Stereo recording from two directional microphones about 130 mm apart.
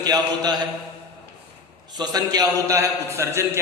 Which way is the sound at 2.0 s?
30° right (ahead or behind).